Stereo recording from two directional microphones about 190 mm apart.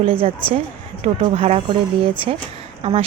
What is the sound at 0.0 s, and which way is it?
Speech, 30° right (ahead or behind).